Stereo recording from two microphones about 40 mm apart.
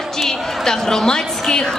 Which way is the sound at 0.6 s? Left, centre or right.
Centre.